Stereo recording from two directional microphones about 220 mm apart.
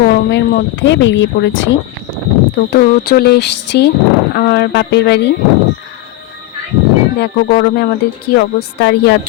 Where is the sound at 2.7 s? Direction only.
45° left (ahead or behind).